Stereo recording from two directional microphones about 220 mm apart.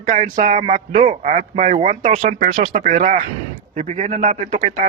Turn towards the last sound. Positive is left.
turn(degrees=-35)  # may be behind; listen again after turning